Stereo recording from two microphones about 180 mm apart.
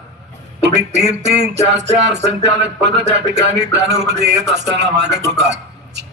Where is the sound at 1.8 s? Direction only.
75° right (ahead or behind).